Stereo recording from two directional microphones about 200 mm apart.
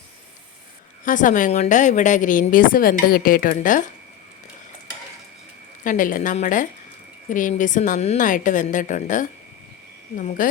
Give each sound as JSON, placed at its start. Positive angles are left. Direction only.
{"t": 1.0, "sound": "a woman's voice", "side_deg": 40}
{"t": 5.8, "sound": "a woman's voice", "side_deg": 40}